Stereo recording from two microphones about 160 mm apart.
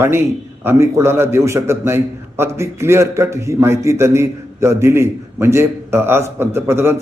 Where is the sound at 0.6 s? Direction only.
15° right (ahead or behind).